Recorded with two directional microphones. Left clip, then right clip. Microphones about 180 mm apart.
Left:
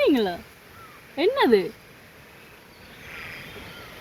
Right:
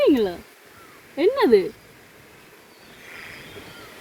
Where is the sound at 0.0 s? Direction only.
25° right (ahead or behind).